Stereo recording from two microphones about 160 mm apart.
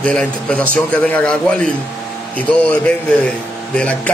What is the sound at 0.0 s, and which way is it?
A man's voice, 5° left (ahead or behind).